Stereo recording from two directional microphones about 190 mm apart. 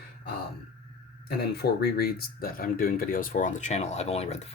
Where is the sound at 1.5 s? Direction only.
55° left (ahead or behind).